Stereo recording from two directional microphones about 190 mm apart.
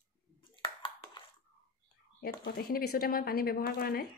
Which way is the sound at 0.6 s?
25° left (ahead or behind).